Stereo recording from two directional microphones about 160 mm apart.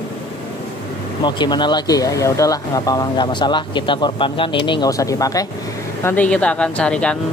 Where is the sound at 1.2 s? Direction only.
30° left (ahead or behind).